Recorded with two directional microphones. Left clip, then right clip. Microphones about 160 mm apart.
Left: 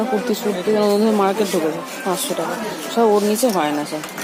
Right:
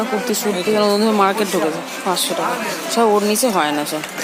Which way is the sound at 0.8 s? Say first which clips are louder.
Right 2 dB; 5° left (ahead or behind).